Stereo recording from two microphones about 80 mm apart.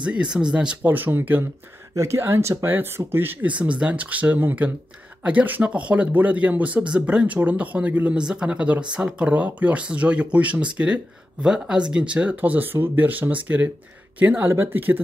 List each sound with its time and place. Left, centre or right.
0.0 s speech: centre
0.8 s speech: right
2.0 s speech: right